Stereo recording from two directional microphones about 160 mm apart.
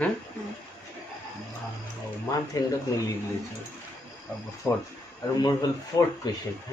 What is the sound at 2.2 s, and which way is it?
Speech, 20° left (ahead or behind).